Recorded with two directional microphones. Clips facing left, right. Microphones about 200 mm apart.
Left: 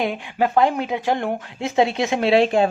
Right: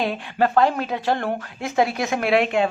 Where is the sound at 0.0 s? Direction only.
15° left (ahead or behind).